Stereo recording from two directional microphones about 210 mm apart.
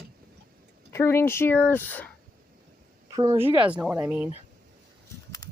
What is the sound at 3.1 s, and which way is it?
Speech, 15° right (ahead or behind).